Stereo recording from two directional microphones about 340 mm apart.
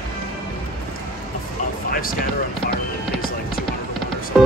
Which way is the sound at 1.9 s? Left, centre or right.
Left.